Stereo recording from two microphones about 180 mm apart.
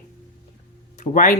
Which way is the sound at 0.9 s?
45° left (ahead or behind).